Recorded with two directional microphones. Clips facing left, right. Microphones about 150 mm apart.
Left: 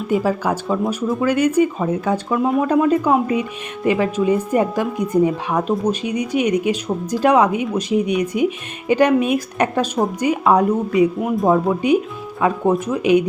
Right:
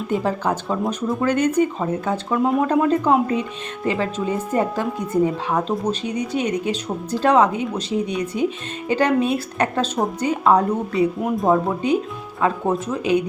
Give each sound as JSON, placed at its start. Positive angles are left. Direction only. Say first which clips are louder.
{"t": 0.1, "sound": "speech", "louder": "left 3 dB", "side_deg": 5}
{"t": 11.8, "sound": "speech", "louder": "left 4 dB", "side_deg": 15}